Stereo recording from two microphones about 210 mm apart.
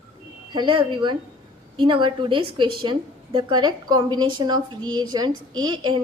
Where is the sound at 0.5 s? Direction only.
25° right (ahead or behind).